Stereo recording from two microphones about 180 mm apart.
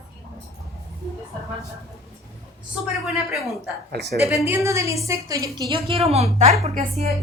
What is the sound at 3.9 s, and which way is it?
Speech, 65° right (ahead or behind).